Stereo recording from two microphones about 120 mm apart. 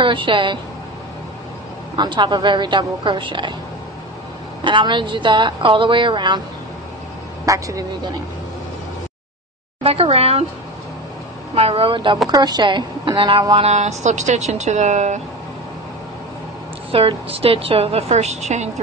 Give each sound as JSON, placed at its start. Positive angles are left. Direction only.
{"t": 0.0, "sound": "a woman's voice", "side_deg": -45}
{"t": 2.0, "sound": "a woman's voice", "side_deg": -40}
{"t": 4.6, "sound": "a woman's voice", "side_deg": -40}
{"t": 7.4, "sound": "speech", "side_deg": -25}
{"t": 9.8, "sound": "a woman's voice", "side_deg": -55}
{"t": 11.5, "sound": "a woman's voice", "side_deg": -55}
{"t": 12.3, "sound": "a woman's voice", "side_deg": -35}
{"t": 13.6, "sound": "speech", "side_deg": -70}
{"t": 16.9, "sound": "a woman's voice", "side_deg": -50}